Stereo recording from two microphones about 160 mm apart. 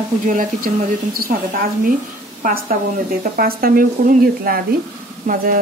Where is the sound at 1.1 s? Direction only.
65° right (ahead or behind).